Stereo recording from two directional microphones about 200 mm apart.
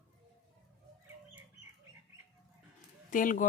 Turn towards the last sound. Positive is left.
turn(degrees=40)  # may be behind; listen again after turning